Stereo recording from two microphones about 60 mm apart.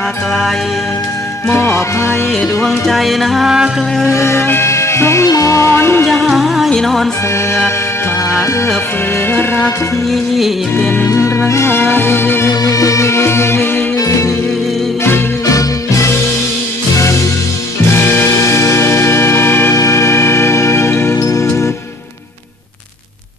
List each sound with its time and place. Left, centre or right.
1.5 s music: left
2.9 s music: centre
4.1 s music: left
5.3 s music: left
5.7 s music: left
6.2 s music: centre
6.7 s music: centre
11.1 s music: left
12.6 s music: left
13.9 s music: left
16.9 s music: left
18.3 s music: left
19.7 s music: left